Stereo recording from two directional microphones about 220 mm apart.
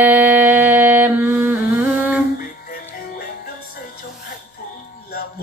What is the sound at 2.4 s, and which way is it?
Music, 40° left (ahead or behind).